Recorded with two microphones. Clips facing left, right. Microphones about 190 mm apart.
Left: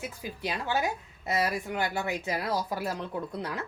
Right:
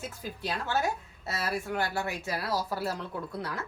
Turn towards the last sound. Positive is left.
turn(degrees=20)  # may be behind; listen again after turning